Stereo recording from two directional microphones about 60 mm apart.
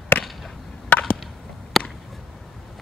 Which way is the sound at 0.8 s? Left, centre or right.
Left.